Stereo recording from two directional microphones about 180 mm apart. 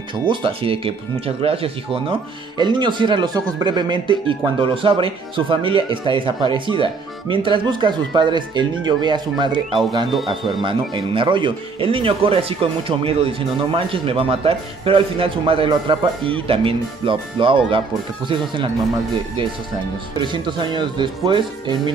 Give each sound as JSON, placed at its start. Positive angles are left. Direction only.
{"t": 0.3, "sound": "speech", "side_deg": -30}
{"t": 20.2, "sound": "speech", "side_deg": -25}